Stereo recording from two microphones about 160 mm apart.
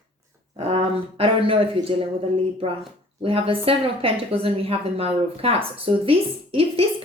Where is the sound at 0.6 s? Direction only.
35° right (ahead or behind).